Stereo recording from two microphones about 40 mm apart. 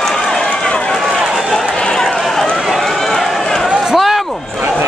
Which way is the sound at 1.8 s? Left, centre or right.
Centre.